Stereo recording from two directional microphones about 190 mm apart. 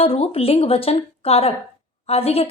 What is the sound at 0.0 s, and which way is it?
A woman's voice, 30° left (ahead or behind).